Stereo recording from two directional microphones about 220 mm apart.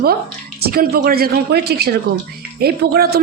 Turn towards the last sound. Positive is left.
turn(degrees=-45)  # may be behind; listen again after turning